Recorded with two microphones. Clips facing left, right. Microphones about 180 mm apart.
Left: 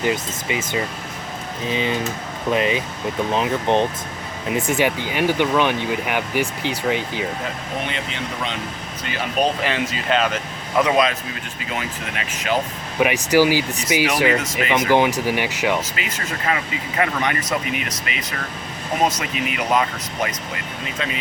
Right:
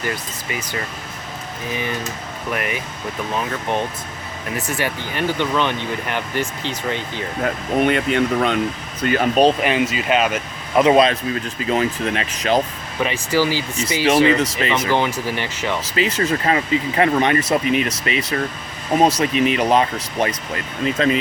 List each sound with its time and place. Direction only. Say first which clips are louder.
0.0 s speech: left 4 dB; 20° left (ahead or behind)
7.4 s speech: right 9 dB; 55° right (ahead or behind)
9.6 s speech: right 3 dB; 10° right (ahead or behind)
10.8 s speech: right 5 dB; 30° right (ahead or behind)
13.0 s speech: left 3 dB; 15° left (ahead or behind)
16.0 s speech: right 9 dB; 30° right (ahead or behind)